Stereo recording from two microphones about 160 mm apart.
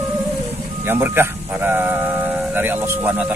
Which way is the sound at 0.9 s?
15° right (ahead or behind).